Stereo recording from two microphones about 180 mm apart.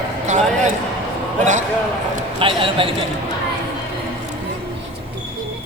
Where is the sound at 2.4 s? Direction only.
30° right (ahead or behind).